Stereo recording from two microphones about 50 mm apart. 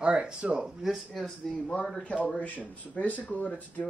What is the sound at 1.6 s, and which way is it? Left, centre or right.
Speech, left.